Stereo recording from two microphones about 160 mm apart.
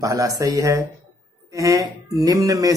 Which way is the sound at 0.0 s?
20° right (ahead or behind).